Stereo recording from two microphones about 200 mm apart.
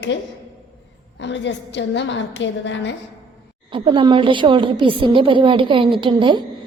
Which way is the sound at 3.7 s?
25° right (ahead or behind).